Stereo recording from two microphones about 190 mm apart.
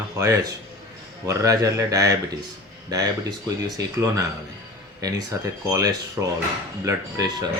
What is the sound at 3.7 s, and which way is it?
Speech, 15° right (ahead or behind).